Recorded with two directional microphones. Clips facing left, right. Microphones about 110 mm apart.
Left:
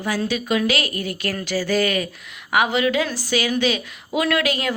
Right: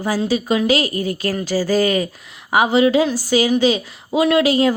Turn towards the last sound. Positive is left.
turn(degrees=-35)  # may be behind; listen again after turning